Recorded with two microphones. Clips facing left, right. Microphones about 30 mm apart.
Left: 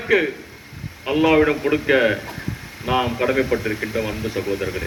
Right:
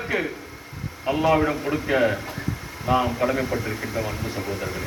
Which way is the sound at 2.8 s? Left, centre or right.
Left.